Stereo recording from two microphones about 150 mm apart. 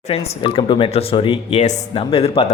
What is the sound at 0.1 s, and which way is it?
Speech, 40° left (ahead or behind).